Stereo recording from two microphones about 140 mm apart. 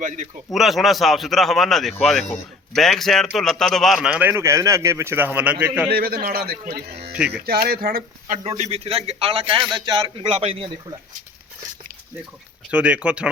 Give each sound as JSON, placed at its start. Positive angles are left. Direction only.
{"t": 0.5, "sound": "a man's voice", "side_deg": 0}
{"t": 5.9, "sound": "a man's voice", "side_deg": -90}
{"t": 7.1, "sound": "speech", "side_deg": -5}
{"t": 7.4, "sound": "a man's voice", "side_deg": -90}
{"t": 8.5, "sound": "a man's voice", "side_deg": -45}
{"t": 12.7, "sound": "speech", "side_deg": -10}